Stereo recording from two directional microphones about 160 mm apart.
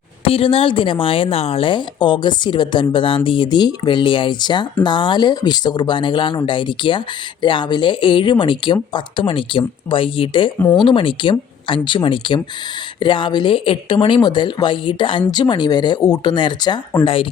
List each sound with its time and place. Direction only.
0.3 s speech: 35° left (ahead or behind)
10.6 s speech: 10° left (ahead or behind)
10.8 s speech: 30° left (ahead or behind)